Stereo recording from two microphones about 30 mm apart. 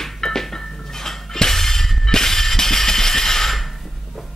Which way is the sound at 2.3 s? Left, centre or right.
Centre.